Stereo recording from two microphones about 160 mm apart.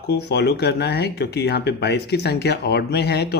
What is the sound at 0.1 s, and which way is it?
Speech, 90° left.